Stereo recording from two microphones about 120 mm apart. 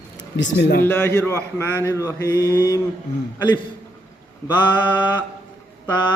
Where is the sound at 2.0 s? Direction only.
30° left (ahead or behind).